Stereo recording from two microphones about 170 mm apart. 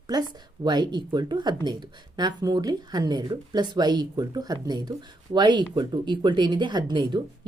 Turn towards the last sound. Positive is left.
turn(degrees=-25)  # may be behind; listen again after turning